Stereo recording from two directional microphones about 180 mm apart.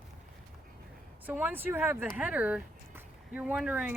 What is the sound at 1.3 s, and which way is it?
Speech, 10° right (ahead or behind).